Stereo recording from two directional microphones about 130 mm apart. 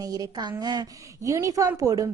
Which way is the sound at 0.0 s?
30° right (ahead or behind).